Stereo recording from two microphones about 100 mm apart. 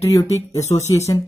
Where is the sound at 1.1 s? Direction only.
45° left (ahead or behind).